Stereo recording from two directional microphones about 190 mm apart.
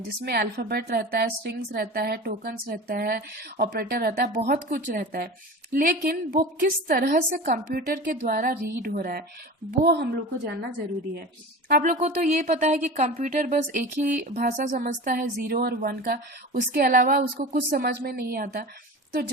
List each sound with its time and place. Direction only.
0.3 s a woman's voice: 55° right (ahead or behind)
9.8 s a woman's voice: 60° right (ahead or behind)
11.8 s a woman's voice: 40° right (ahead or behind)